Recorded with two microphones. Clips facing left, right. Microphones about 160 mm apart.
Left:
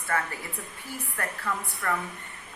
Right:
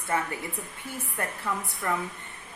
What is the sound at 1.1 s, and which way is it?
Speech, 20° right (ahead or behind).